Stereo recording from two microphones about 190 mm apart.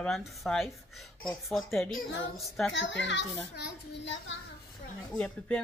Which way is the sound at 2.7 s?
70° left (ahead or behind).